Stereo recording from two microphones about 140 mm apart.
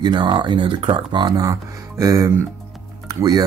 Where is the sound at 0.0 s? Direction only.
35° right (ahead or behind).